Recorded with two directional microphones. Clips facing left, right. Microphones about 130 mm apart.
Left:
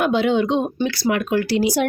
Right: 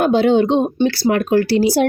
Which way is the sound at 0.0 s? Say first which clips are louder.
Right 5 dB; 35° right (ahead or behind).